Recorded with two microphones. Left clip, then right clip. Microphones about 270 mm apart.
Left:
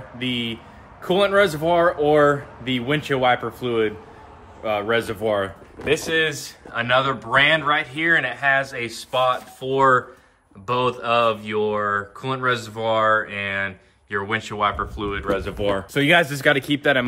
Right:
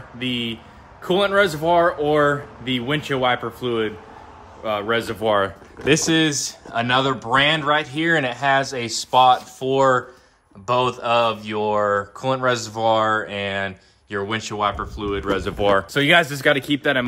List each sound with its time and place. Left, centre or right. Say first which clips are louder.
0.2 s speech: right 1 dB; centre
5.2 s speech: right 3 dB; right
6.2 s speech: right 2 dB; centre
15.3 s speech: right 7 dB; right
15.9 s speech: right 1 dB; centre